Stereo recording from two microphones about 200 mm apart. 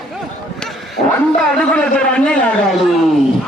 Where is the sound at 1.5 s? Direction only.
5° left (ahead or behind).